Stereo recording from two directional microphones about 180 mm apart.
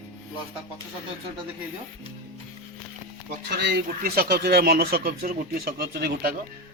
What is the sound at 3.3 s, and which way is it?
A man's voice, 65° right (ahead or behind).